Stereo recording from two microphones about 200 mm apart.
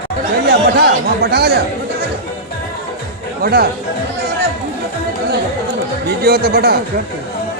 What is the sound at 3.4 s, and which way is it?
Speech, 50° right (ahead or behind).